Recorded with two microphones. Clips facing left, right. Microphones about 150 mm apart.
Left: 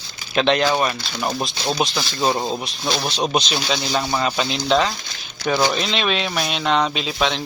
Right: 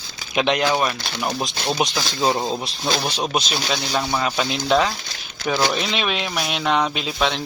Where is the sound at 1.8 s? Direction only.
15° right (ahead or behind).